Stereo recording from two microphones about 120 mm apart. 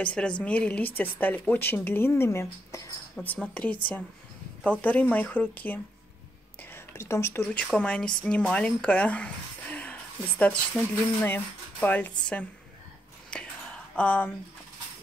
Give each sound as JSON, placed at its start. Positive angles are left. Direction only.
{"t": 0.0, "sound": "a woman's voice", "side_deg": 10}
{"t": 3.2, "sound": "a woman's voice", "side_deg": 10}
{"t": 6.6, "sound": "a sound", "side_deg": 20}
{"t": 7.5, "sound": "a woman's voice", "side_deg": 10}
{"t": 13.3, "sound": "whispering", "side_deg": 10}
{"t": 13.9, "sound": "a woman's voice", "side_deg": 10}